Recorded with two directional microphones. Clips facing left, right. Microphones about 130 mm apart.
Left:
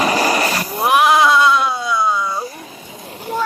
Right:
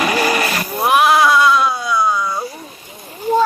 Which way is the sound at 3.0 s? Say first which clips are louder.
Right 6 dB; 70° left (ahead or behind).